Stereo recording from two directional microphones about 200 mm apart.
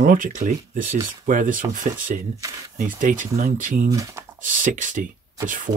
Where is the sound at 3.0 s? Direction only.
40° right (ahead or behind).